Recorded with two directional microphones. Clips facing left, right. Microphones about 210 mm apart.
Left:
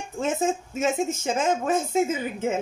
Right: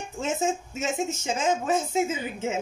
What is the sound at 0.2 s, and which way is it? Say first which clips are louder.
Speech: left 2 dB; 55° left (ahead or behind).